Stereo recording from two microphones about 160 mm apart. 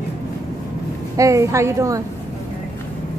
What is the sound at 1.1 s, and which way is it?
Speech, 20° right (ahead or behind).